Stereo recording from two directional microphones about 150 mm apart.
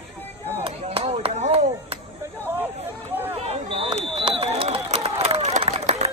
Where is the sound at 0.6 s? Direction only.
40° right (ahead or behind).